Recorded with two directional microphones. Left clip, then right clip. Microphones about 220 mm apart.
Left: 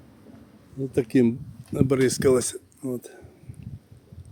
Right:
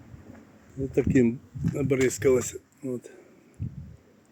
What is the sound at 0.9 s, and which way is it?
Speech, 15° left (ahead or behind).